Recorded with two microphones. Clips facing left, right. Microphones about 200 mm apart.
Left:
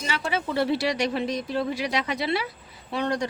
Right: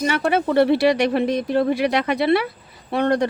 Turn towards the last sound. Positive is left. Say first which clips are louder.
# right 7 dB
turn(degrees=-60)  # may be behind; listen again after turning